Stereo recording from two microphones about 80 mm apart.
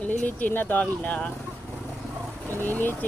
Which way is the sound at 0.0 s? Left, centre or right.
Left.